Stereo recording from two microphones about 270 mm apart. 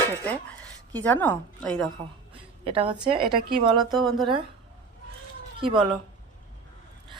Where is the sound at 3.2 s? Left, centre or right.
Right.